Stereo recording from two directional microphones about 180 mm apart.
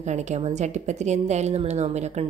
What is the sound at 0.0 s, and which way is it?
A woman's voice, 40° right (ahead or behind).